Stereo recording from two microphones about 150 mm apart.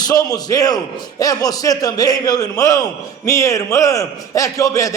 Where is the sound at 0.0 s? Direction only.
25° left (ahead or behind).